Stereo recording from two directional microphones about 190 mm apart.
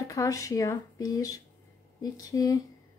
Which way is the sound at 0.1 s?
15° left (ahead or behind).